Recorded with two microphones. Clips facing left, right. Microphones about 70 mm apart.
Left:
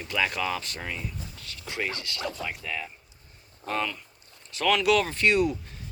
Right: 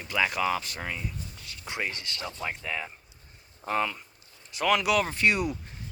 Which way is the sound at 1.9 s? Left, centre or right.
Right.